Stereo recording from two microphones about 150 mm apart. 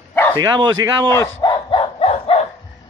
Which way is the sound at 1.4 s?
30° left (ahead or behind).